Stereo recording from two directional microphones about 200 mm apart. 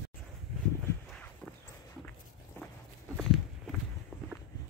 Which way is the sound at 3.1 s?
Centre (ahead or behind).